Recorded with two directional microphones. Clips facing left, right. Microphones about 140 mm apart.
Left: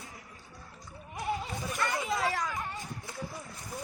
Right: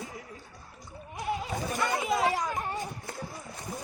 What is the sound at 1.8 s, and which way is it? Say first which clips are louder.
Chatter: right 3 dB; 20° right (ahead or behind).